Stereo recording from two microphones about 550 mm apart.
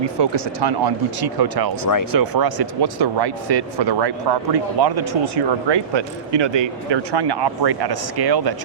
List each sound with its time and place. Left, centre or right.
0.2 s speech: right